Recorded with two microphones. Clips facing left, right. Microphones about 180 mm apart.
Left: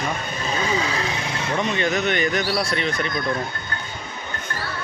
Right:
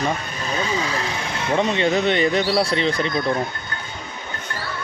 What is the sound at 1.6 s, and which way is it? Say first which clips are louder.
Speech: right 4 dB; 30° right (ahead or behind).